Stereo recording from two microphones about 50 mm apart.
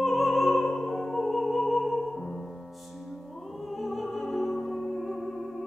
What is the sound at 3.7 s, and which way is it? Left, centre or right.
Music, centre.